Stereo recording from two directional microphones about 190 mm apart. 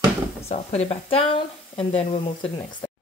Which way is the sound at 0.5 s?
35° left (ahead or behind).